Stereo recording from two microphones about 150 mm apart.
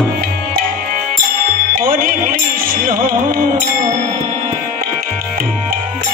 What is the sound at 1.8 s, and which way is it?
Music, 65° right (ahead or behind).